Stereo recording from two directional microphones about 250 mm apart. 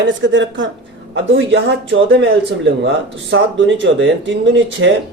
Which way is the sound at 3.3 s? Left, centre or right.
Right.